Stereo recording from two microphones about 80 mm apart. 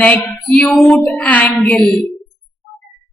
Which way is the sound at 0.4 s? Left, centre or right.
Centre.